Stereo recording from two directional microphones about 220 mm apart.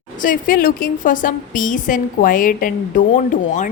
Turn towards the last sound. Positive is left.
turn(degrees=35)  # may be behind; listen again after turning